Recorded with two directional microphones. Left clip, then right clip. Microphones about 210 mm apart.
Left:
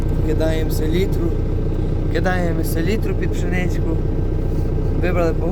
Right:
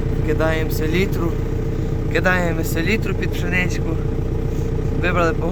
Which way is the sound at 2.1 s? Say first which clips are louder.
Right 3 dB; 15° left (ahead or behind).